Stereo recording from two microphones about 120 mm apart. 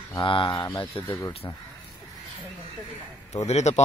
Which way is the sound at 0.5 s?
20° left (ahead or behind).